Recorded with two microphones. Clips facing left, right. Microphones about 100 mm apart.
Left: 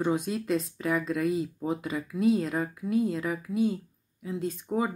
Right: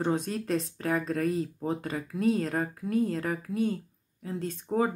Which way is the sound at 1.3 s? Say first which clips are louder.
Left 1 dB; 5° left (ahead or behind).